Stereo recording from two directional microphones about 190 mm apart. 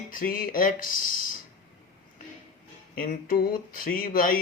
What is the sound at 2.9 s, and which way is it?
Speech, 45° left (ahead or behind).